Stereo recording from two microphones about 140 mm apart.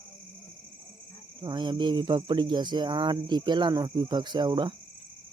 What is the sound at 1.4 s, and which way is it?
Speech, 30° right (ahead or behind).